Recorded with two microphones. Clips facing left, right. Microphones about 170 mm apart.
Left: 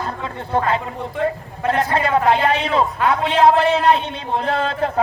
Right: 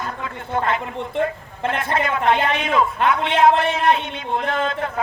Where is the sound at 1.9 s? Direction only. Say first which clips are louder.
Left 1 dB; 35° left (ahead or behind).